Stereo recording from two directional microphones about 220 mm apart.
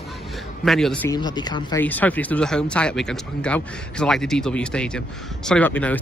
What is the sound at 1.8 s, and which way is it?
Speech, 5° left (ahead or behind).